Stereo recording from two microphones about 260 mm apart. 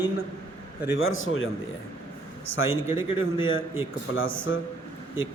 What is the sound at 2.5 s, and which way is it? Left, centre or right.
Speech, left.